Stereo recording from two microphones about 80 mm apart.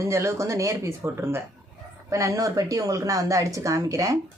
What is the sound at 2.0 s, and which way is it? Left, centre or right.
Speech, right.